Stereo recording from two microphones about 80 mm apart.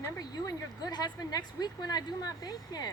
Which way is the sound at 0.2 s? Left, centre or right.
Left.